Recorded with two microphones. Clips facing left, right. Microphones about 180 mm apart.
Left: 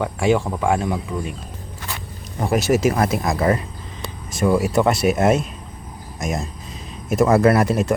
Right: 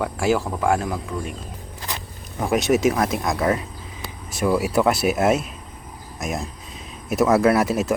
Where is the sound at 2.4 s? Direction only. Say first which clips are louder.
Left 1 dB; centre (ahead or behind).